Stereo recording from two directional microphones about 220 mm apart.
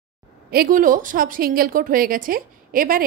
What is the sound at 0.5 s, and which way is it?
Speech, 40° right (ahead or behind).